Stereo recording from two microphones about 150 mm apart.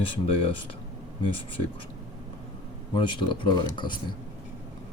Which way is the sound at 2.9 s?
35° left (ahead or behind).